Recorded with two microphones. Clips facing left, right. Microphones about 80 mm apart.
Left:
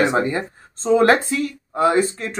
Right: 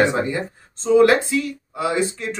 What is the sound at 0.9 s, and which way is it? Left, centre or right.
A man's voice, left.